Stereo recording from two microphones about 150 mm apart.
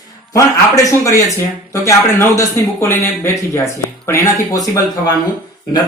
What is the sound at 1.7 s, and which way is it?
Speech, 20° left (ahead or behind).